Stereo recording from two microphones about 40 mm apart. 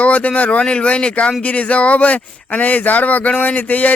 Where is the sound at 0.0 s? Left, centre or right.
Left.